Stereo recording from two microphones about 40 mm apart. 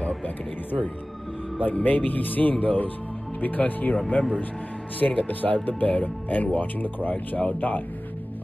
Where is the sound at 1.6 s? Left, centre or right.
Left.